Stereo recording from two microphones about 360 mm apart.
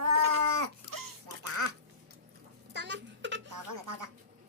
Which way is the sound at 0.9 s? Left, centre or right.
Right.